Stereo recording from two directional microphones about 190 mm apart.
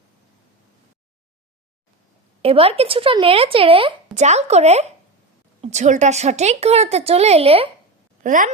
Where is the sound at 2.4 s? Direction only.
30° right (ahead or behind).